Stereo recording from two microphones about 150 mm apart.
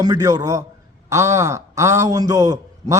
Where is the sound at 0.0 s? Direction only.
25° right (ahead or behind).